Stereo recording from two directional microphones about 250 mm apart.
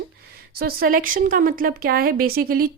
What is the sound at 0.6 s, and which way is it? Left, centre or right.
A woman's voice, right.